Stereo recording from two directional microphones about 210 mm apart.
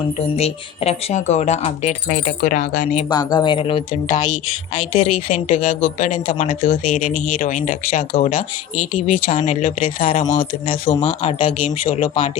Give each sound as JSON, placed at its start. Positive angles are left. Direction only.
{"t": 0.3, "sound": "speech", "side_deg": 30}
{"t": 3.1, "sound": "speech", "side_deg": 20}
{"t": 4.9, "sound": "speech", "side_deg": 30}